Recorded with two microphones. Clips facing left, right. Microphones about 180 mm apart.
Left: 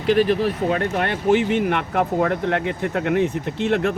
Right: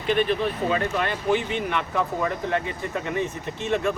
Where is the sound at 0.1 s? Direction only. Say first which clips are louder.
Left 5 dB; 80° left.